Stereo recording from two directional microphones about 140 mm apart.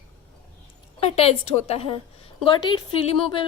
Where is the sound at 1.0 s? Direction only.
45° left (ahead or behind).